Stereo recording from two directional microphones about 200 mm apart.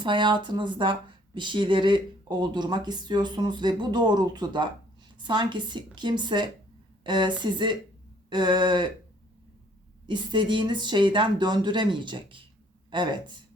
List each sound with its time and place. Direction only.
0.0 s speech: 25° right (ahead or behind)
10.1 s speech: 25° right (ahead or behind)